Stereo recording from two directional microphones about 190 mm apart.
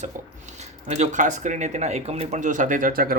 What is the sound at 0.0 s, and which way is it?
Speech, 40° right (ahead or behind).